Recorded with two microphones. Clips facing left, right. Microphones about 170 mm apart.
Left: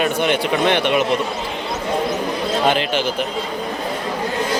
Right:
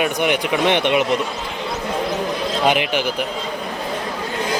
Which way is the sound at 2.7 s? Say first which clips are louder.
Right 1 dB; 15° right (ahead or behind).